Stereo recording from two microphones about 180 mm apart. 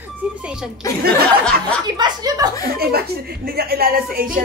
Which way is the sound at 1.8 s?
20° right (ahead or behind).